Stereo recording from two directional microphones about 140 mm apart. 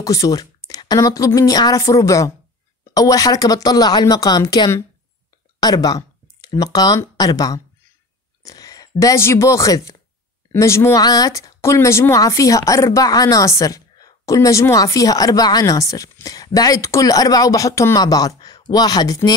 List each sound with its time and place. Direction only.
0.0 s speech: 25° left (ahead or behind)
8.4 s a sound: 25° left (ahead or behind)
9.0 s speech: 20° left (ahead or behind)